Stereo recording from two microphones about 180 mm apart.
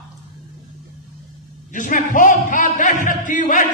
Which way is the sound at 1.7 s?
45° left (ahead or behind).